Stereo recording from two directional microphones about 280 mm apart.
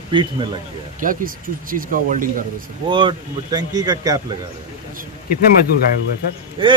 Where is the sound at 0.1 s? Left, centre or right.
Centre.